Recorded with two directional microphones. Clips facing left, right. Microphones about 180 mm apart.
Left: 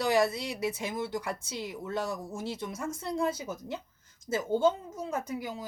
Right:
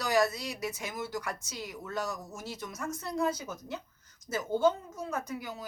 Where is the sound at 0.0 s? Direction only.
30° left (ahead or behind).